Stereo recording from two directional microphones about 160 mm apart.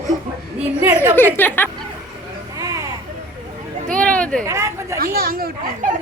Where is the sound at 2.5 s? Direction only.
20° right (ahead or behind).